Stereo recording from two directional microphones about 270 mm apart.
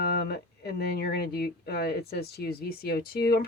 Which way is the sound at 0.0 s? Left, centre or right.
Left.